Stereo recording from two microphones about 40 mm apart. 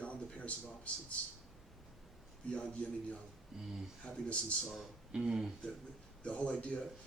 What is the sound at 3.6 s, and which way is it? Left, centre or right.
Speech, centre.